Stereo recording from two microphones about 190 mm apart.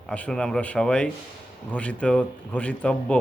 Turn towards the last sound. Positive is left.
turn(degrees=5)  # may be behind; listen again after turning